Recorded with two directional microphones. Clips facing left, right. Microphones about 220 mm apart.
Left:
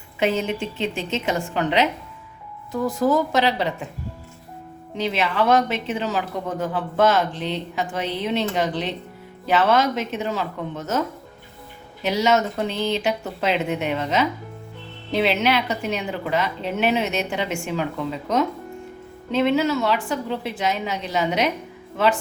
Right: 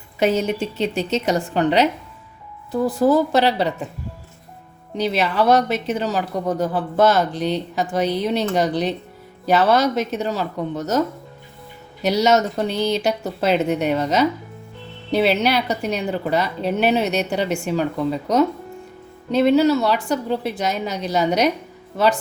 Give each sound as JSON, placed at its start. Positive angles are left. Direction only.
{"t": 0.2, "sound": "speech", "side_deg": -40}
{"t": 4.9, "sound": "speech", "side_deg": -40}
{"t": 12.0, "sound": "speech", "side_deg": -40}